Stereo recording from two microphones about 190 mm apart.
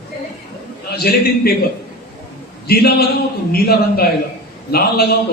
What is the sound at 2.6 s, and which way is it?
A man's voice, 55° left (ahead or behind).